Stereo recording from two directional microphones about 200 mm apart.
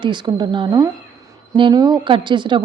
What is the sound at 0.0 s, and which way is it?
Speech, 20° right (ahead or behind).